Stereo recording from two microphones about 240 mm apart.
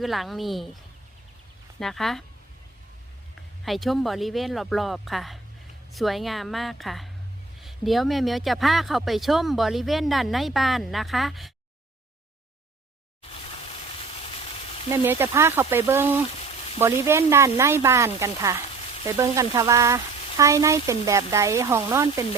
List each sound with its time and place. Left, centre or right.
0.0 s speech: centre
1.8 s speech: centre
3.7 s speech: centre
14.2 s a sound: left
14.8 s speech: centre